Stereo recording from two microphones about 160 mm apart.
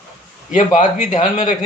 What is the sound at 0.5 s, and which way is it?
A man's voice, 50° left (ahead or behind).